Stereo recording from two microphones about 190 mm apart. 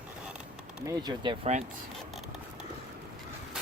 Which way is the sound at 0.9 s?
25° right (ahead or behind).